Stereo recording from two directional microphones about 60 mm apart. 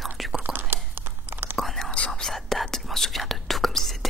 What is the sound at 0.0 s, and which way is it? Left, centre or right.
Whispering, centre.